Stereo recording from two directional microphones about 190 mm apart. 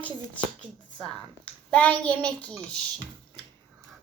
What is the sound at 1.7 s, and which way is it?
A child's voice, 10° left (ahead or behind).